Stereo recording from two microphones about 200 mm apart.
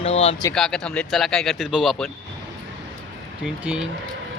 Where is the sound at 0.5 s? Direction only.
5° left (ahead or behind).